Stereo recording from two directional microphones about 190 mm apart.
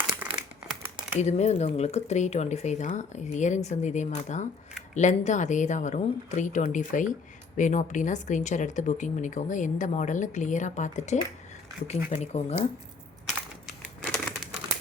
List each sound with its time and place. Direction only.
0.3 s crumpling: 5° right (ahead or behind)
1.2 s a woman's voice: 35° left (ahead or behind)
13.7 s a sound: 5° left (ahead or behind)